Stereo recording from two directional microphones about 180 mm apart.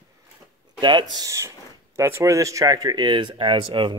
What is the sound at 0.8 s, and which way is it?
Speech, 25° right (ahead or behind).